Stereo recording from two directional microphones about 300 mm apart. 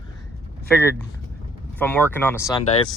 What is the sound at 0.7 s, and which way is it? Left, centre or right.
Speech, centre.